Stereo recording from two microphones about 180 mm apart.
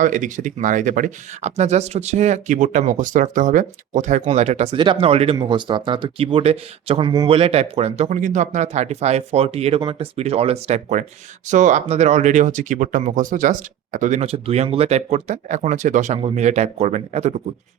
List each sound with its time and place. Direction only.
0.0 s speech: 45° right (ahead or behind)